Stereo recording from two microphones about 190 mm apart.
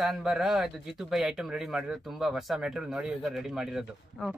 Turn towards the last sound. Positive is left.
turn(degrees=-5)  # may be behind; listen again after turning